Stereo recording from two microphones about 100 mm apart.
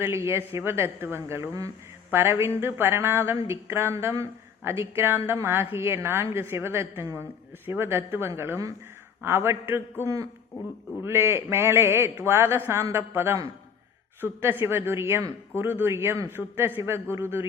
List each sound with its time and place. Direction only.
0.0 s speech: 30° right (ahead or behind)
2.0 s speech: 25° right (ahead or behind)
11.0 s speech: 25° right (ahead or behind)